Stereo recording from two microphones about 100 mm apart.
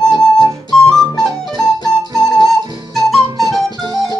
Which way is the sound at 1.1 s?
45° left (ahead or behind).